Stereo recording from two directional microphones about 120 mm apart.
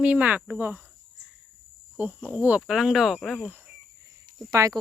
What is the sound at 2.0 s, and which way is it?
Speech, 15° right (ahead or behind).